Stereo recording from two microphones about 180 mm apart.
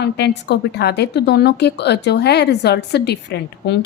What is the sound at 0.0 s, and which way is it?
A woman's voice, 70° left (ahead or behind).